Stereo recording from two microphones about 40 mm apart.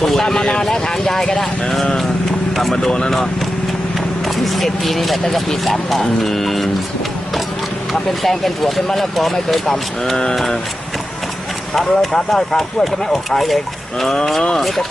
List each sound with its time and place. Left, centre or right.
0.0 s speech: centre
2.7 s speech: centre
4.4 s speech: centre
7.9 s speech: centre
11.7 s speech: centre